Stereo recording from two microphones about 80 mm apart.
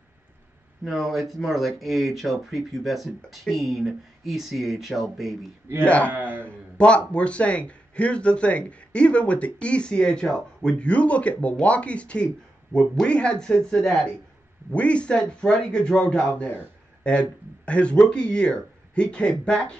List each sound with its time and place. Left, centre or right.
0.8 s speech: centre
5.9 s speech: centre